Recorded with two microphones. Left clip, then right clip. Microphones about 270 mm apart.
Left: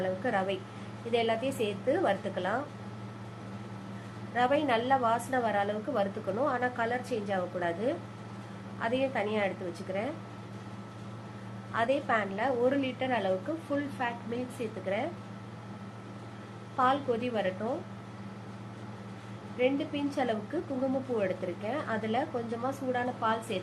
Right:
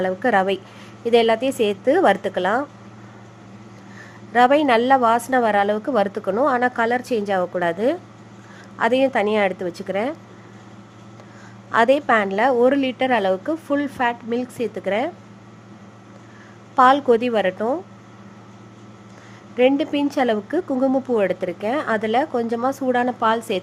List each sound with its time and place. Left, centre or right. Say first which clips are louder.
0.0 s a woman's voice: right 12 dB; right
4.4 s a woman's voice: right 12 dB; right
11.7 s a woman's voice: right 13 dB; right
16.7 s a woman's voice: right 14 dB; right
19.5 s a woman's voice: right 12 dB; right